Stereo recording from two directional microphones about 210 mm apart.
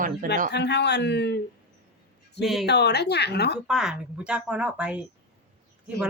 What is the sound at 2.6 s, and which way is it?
Speech, 55° left (ahead or behind).